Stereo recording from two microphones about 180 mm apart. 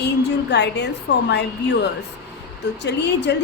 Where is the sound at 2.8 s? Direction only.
70° left (ahead or behind).